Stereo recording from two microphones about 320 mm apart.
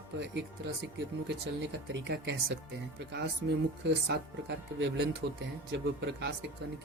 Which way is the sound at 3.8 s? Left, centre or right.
Right.